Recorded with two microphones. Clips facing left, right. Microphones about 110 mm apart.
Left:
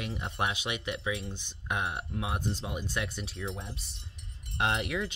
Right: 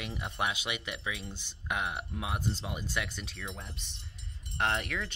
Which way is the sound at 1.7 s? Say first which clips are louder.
Left 1 dB; 20° left (ahead or behind).